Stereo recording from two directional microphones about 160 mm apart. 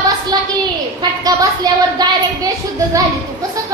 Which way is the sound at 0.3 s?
25° right (ahead or behind).